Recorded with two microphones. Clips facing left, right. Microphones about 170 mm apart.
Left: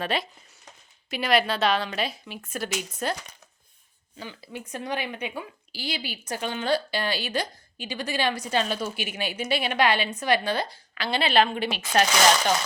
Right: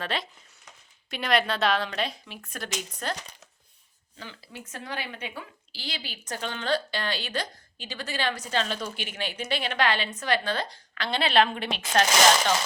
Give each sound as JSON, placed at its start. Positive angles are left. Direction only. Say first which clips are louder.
{"t": 0.0, "sound": "a woman's voice", "louder": "left 4 dB", "side_deg": 10}
{"t": 4.2, "sound": "a woman's voice", "louder": "left 5 dB", "side_deg": 15}